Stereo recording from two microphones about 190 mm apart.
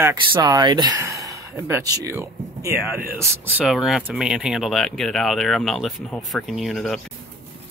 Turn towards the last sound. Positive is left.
turn(degrees=0)  # may be behind; listen again after turning